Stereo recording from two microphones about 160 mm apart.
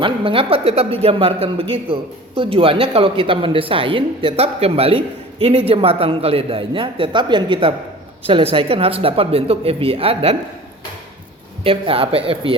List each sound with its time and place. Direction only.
0.0 s speech: 35° right (ahead or behind)
11.6 s speech: 35° right (ahead or behind)